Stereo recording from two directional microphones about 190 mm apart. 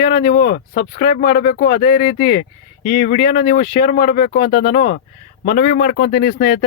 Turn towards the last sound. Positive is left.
turn(degrees=50)  # may be behind; listen again after turning